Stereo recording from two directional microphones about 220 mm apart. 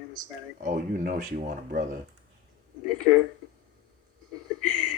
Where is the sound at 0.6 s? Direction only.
35° right (ahead or behind).